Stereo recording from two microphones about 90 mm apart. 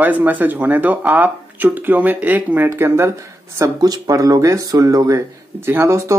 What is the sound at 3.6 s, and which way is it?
Speech, 40° right (ahead or behind).